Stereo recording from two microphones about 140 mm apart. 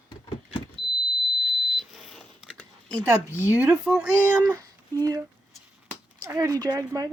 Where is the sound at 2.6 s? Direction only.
10° left (ahead or behind).